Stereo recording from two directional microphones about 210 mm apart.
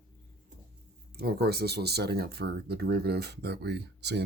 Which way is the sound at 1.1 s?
50° right (ahead or behind).